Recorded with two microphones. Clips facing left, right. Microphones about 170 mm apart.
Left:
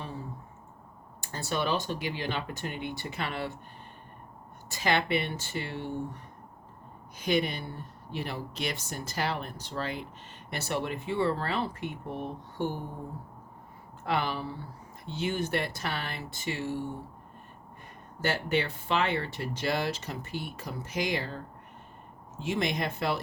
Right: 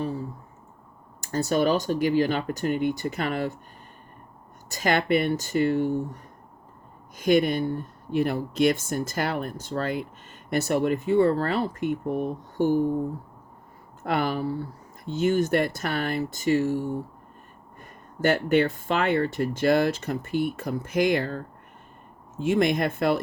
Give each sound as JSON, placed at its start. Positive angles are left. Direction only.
{"t": 1.2, "sound": "speech", "side_deg": -45}
{"t": 4.7, "sound": "speech", "side_deg": -45}
{"t": 7.2, "sound": "speech", "side_deg": -50}
{"t": 14.0, "sound": "speech", "side_deg": -45}
{"t": 18.2, "sound": "speech", "side_deg": -50}